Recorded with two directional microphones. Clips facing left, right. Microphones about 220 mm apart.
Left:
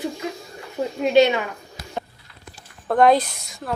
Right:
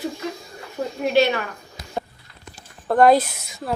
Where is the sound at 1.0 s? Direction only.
20° left (ahead or behind).